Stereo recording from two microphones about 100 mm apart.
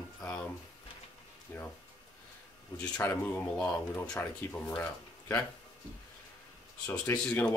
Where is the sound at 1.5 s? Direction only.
20° left (ahead or behind).